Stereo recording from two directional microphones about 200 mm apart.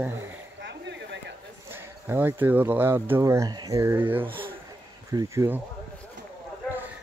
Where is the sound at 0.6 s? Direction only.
60° right (ahead or behind).